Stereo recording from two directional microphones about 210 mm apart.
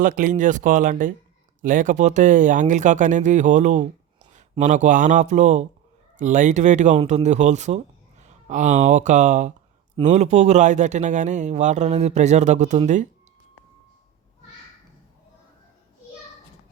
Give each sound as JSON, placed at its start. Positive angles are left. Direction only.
{"t": 0.0, "sound": "speech", "side_deg": -40}